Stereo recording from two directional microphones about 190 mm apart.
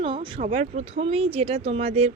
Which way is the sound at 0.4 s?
35° right (ahead or behind).